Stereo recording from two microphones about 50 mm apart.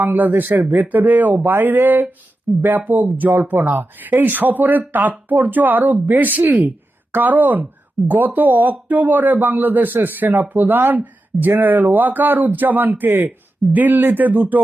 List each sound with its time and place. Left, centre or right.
0.0 s speech: right